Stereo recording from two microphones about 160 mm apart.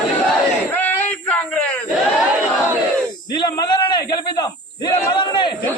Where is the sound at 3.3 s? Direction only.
25° left (ahead or behind).